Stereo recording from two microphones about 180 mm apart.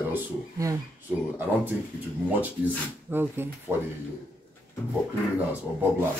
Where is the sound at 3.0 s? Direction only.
10° right (ahead or behind).